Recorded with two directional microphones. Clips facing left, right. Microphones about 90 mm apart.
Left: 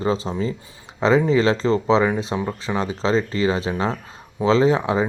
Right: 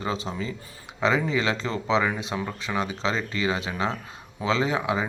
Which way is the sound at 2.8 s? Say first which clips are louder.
Left 7 dB; 35° left (ahead or behind).